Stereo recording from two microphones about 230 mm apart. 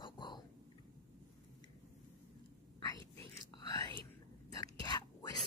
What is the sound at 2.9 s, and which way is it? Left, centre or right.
Whispering, right.